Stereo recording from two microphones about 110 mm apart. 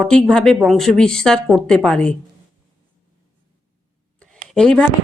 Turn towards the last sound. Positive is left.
turn(degrees=5)  # may be behind; listen again after turning